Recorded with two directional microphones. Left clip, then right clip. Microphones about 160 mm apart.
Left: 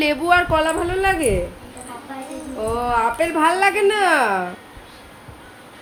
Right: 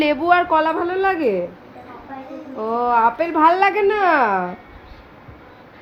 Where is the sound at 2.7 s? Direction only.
35° right (ahead or behind).